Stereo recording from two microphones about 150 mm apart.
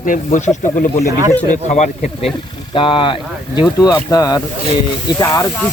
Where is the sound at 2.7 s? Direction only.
35° left (ahead or behind).